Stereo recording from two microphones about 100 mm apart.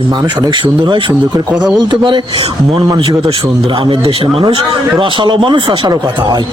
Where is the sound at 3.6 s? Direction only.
60° right (ahead or behind).